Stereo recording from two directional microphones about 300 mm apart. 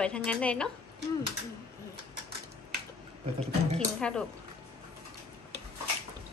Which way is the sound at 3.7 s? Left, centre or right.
Centre.